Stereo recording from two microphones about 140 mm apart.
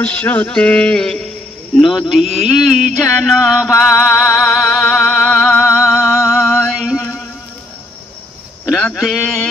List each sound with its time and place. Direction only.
0.0 s music: 10° left (ahead or behind)
1.8 s a man's voice: centre (ahead or behind)
3.0 s music: centre (ahead or behind)
6.6 s a sound: 5° right (ahead or behind)
8.6 s a sound: centre (ahead or behind)
9.0 s a man's voice: centre (ahead or behind)